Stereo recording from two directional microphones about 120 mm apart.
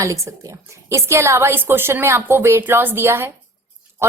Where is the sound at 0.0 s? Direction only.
25° right (ahead or behind).